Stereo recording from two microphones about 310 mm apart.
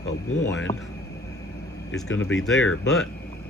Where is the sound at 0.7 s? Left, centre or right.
Centre.